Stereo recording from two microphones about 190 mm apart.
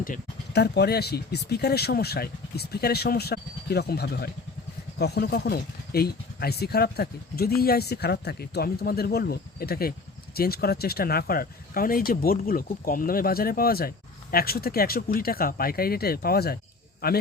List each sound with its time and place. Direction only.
0.0 s speech: 55° left (ahead or behind)